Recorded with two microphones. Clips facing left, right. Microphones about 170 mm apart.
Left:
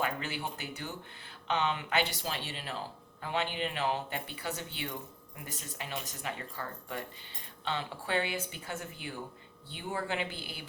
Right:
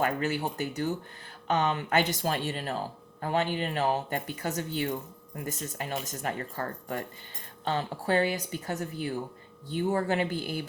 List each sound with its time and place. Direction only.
0.0 s speech: 45° right (ahead or behind)